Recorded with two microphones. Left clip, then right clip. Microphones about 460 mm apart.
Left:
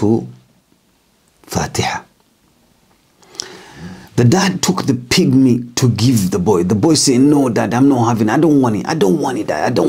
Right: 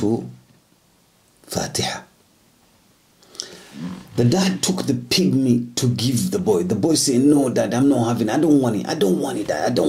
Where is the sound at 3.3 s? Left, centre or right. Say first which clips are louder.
Left 5 dB; left.